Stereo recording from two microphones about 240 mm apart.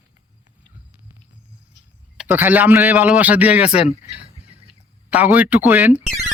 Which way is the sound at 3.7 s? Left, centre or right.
Left.